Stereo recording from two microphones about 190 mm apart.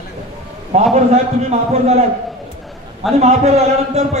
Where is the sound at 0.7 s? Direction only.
35° right (ahead or behind).